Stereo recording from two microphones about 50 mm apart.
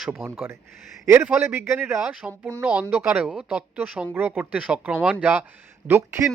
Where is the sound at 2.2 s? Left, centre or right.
Right.